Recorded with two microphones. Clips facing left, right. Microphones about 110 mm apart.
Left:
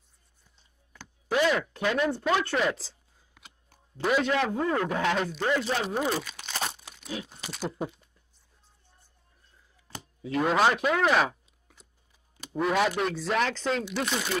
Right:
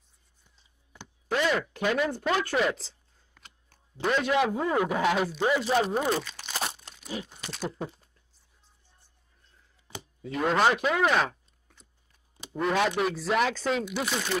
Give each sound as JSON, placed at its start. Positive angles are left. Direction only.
{"t": 1.3, "sound": "speech", "side_deg": 0}
{"t": 4.4, "sound": "speech", "side_deg": -10}
{"t": 6.8, "sound": "crunch", "side_deg": 5}
{"t": 7.4, "sound": "speech", "side_deg": 5}
{"t": 9.9, "sound": "chop", "side_deg": -15}
{"t": 10.2, "sound": "speech", "side_deg": 0}